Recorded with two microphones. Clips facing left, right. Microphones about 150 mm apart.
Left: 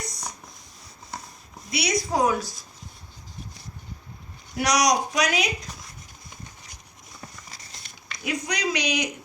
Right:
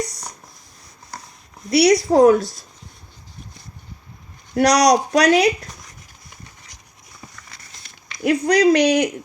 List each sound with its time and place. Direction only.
1.7 s speech: 65° right (ahead or behind)
4.5 s speech: 65° right (ahead or behind)
8.2 s speech: 60° right (ahead or behind)